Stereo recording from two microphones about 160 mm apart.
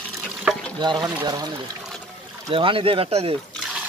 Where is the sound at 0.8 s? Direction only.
25° right (ahead or behind).